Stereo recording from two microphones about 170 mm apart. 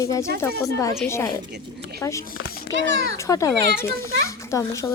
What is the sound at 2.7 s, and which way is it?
Speech, 90° right.